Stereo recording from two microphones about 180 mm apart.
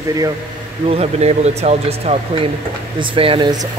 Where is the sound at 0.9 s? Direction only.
35° right (ahead or behind).